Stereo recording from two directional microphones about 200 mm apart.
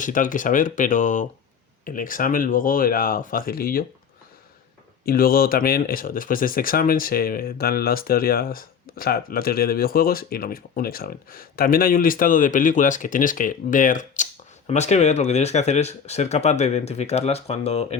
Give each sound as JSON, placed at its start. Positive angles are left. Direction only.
{"t": 0.0, "sound": "speech", "side_deg": 40}
{"t": 5.0, "sound": "speech", "side_deg": 45}